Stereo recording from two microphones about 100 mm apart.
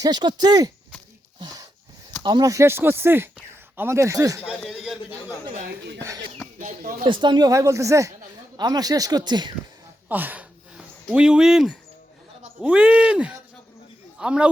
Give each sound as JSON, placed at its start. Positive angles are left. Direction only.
{"t": 0.0, "sound": "speech", "side_deg": -45}
{"t": 4.7, "sound": "speech", "side_deg": -5}
{"t": 6.7, "sound": "speech", "side_deg": -55}
{"t": 7.5, "sound": "speech", "side_deg": -35}
{"t": 8.5, "sound": "speech", "side_deg": -40}
{"t": 10.1, "sound": "a sound", "side_deg": -15}
{"t": 11.0, "sound": "speech", "side_deg": -10}